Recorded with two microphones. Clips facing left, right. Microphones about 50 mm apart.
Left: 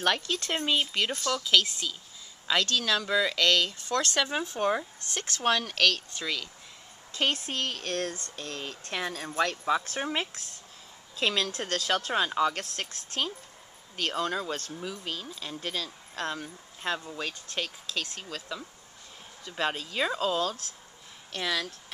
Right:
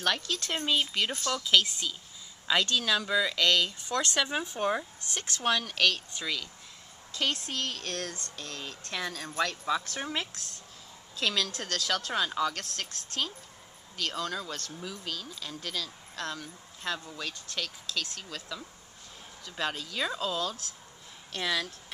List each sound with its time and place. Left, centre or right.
0.0 s speech: centre
0.6 s speech: centre
3.8 s speech: centre
4.2 s speech: centre
5.8 s speech: centre
6.2 s speech: centre
7.1 s speech: left
14.7 s speech: centre
15.0 s speech: left
21.4 s speech: centre